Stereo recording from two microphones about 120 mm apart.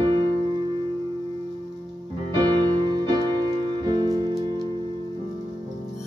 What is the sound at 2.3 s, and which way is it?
Music, 35° right (ahead or behind).